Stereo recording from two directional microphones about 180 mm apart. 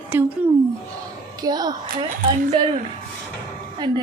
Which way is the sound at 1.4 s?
20° right (ahead or behind).